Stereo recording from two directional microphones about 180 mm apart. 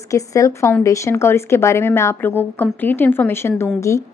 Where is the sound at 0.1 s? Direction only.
15° left (ahead or behind).